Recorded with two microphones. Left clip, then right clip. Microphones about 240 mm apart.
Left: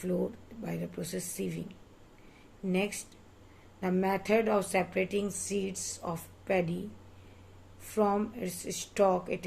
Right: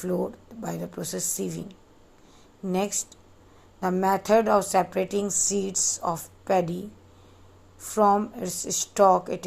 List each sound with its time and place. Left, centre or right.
0.0 s a woman's voice: right
3.8 s a woman's voice: right
7.9 s a woman's voice: right